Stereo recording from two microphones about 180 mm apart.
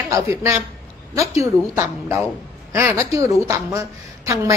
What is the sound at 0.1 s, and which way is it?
A woman's voice, 15° right (ahead or behind).